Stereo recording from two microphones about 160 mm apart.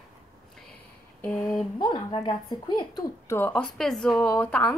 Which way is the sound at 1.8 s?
30° left (ahead or behind).